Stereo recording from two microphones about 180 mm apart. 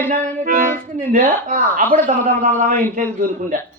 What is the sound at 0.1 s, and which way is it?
Speech, 50° right (ahead or behind).